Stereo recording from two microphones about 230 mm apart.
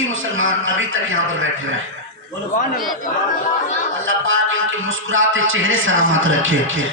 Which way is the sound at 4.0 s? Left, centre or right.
Right.